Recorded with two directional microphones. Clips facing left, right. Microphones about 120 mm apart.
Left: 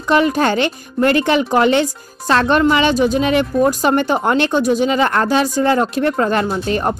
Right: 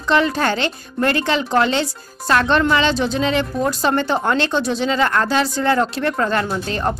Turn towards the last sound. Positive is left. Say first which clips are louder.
# left 4 dB
turn(degrees=20)  # may be behind; listen again after turning